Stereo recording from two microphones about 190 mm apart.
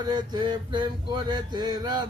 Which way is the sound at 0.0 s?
20° right (ahead or behind).